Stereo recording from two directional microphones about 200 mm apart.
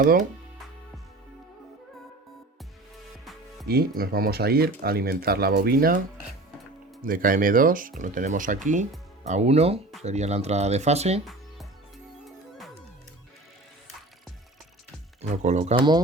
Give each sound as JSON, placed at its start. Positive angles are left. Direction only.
{"t": 3.7, "sound": "speech", "side_deg": -50}
{"t": 7.0, "sound": "speech", "side_deg": -45}
{"t": 15.2, "sound": "speech", "side_deg": -35}